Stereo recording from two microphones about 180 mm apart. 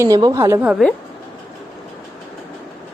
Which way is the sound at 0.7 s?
Centre (ahead or behind).